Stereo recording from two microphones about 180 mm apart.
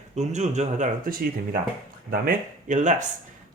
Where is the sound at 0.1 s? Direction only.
40° right (ahead or behind).